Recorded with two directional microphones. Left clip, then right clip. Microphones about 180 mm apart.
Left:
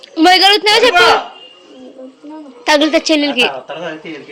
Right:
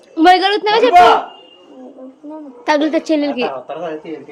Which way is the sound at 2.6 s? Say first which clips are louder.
Left 4 dB; centre (ahead or behind).